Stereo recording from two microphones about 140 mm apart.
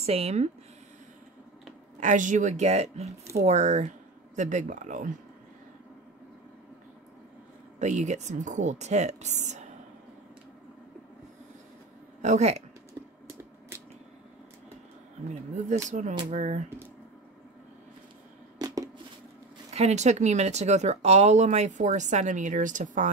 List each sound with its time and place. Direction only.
0.0 s speech: 45° right (ahead or behind)
2.0 s speech: 65° right (ahead or behind)
7.8 s speech: 55° right (ahead or behind)
12.2 s speech: 55° right (ahead or behind)
15.2 s speech: 55° right (ahead or behind)
18.6 s a sound: 25° right (ahead or behind)
19.7 s speech: 50° right (ahead or behind)